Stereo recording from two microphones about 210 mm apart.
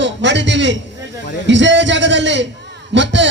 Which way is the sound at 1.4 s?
60° right (ahead or behind).